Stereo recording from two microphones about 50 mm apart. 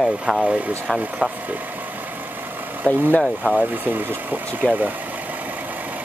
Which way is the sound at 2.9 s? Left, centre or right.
Left.